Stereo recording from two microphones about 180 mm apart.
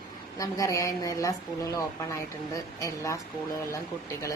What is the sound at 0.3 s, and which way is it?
Speech, 20° left (ahead or behind).